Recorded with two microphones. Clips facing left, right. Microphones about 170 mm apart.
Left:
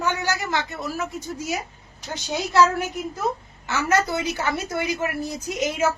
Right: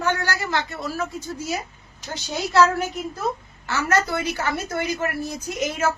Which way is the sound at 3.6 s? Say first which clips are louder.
Even; 20° left (ahead or behind).